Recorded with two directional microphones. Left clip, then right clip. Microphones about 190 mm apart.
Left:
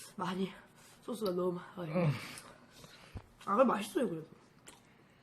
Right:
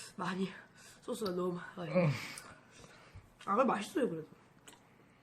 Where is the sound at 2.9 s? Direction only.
10° right (ahead or behind).